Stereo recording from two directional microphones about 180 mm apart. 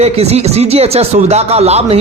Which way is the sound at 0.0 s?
35° right (ahead or behind).